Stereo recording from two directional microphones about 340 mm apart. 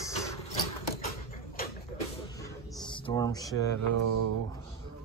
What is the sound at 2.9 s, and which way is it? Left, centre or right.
Speech, centre.